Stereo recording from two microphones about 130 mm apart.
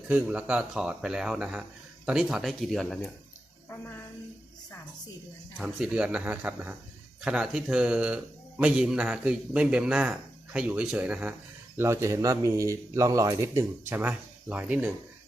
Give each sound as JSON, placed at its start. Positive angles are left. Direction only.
{"t": 0.1, "sound": "speech", "side_deg": -10}
{"t": 3.7, "sound": "a woman's voice", "side_deg": 15}
{"t": 5.5, "sound": "a man's voice", "side_deg": -5}
{"t": 11.8, "sound": "a man's voice", "side_deg": -25}